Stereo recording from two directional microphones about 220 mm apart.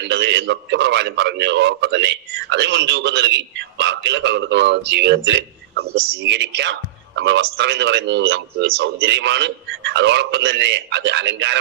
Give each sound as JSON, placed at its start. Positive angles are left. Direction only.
{"t": 0.0, "sound": "a man's voice", "side_deg": -50}